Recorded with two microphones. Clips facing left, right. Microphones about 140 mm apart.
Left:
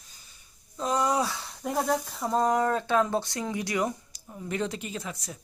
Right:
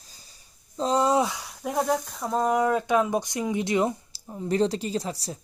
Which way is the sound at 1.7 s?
Centre (ahead or behind).